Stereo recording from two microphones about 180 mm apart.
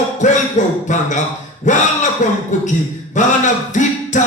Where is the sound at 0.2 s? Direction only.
45° left (ahead or behind).